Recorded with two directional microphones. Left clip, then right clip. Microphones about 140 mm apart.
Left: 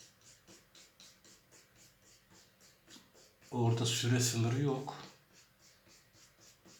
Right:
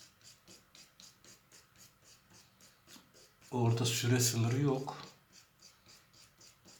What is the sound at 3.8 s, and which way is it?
Speech, 40° right (ahead or behind).